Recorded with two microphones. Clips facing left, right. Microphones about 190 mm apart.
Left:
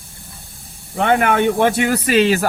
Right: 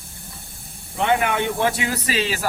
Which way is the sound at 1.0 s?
55° left (ahead or behind).